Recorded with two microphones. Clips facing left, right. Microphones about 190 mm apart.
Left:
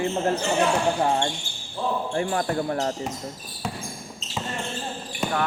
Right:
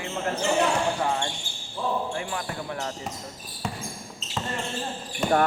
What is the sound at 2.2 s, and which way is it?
Speech, 45° left (ahead or behind).